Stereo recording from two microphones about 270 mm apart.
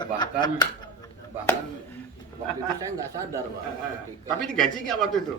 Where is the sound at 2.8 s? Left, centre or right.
Centre.